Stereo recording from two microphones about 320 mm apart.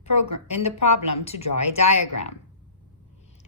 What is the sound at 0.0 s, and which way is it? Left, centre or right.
A woman's voice, centre.